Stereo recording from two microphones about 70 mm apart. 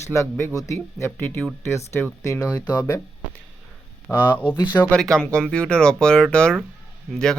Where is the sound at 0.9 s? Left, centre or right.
Left.